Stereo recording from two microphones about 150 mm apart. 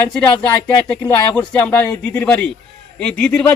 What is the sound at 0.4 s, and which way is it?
Speech, 10° left (ahead or behind).